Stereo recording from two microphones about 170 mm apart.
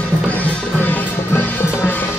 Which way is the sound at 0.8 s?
10° left (ahead or behind).